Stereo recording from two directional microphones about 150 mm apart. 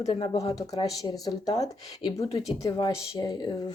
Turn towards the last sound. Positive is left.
turn(degrees=30)  # may be behind; listen again after turning